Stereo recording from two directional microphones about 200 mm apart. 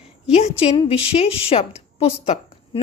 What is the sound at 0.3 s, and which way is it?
A woman's voice, 30° left (ahead or behind).